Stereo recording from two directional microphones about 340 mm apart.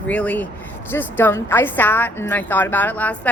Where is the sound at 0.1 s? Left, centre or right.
Centre.